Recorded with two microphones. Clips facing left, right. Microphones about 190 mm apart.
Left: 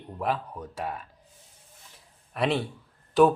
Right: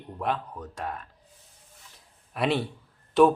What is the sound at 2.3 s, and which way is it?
Speech, centre (ahead or behind).